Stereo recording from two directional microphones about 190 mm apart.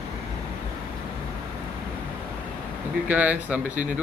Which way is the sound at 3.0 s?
10° right (ahead or behind).